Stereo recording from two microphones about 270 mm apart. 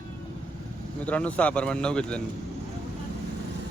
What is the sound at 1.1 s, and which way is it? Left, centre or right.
Speech, centre.